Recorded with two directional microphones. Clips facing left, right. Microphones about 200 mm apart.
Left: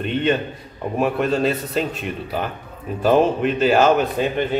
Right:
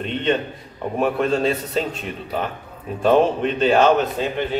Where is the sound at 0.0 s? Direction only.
5° left (ahead or behind).